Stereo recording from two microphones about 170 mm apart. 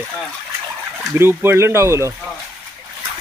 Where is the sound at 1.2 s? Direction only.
15° right (ahead or behind).